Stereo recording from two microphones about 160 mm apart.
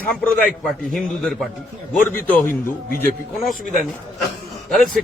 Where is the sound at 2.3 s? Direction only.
55° left (ahead or behind).